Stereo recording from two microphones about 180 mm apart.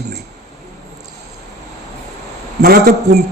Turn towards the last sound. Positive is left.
turn(degrees=-60)  # may be behind; listen again after turning